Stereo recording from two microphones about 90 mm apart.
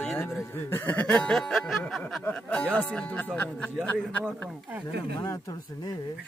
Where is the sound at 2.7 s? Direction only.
15° left (ahead or behind).